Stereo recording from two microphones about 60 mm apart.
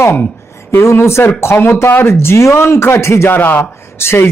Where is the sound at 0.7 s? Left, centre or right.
Left.